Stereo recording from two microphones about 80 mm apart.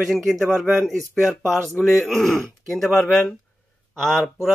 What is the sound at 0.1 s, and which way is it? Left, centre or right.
A man's voice, centre.